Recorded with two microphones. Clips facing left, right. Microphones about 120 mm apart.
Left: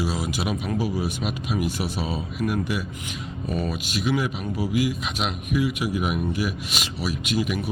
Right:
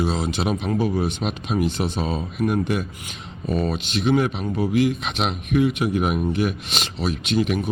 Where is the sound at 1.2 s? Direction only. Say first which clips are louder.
Right 3 dB; 40° right (ahead or behind).